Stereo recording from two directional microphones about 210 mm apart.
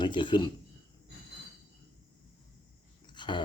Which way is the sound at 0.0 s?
20° left (ahead or behind).